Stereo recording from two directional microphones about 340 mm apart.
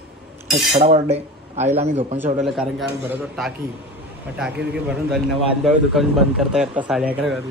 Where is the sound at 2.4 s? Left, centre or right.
Centre.